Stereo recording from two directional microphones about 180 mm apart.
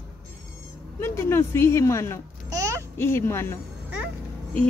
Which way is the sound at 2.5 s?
15° right (ahead or behind).